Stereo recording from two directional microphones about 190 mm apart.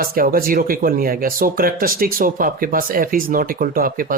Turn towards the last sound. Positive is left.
turn(degrees=-50)  # may be behind; listen again after turning